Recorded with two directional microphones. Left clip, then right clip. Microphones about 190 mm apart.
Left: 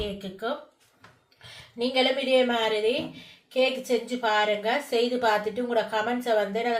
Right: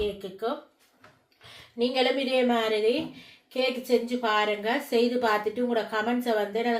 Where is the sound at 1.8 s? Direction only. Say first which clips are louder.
Left 1 dB; 25° right (ahead or behind).